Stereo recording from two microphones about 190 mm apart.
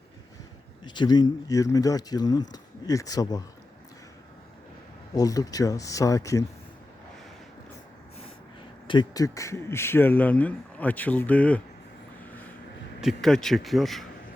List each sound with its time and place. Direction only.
0.9 s speech: 25° left (ahead or behind)
5.1 s speech: 20° left (ahead or behind)
8.9 s speech: 20° left (ahead or behind)
13.0 s speech: centre (ahead or behind)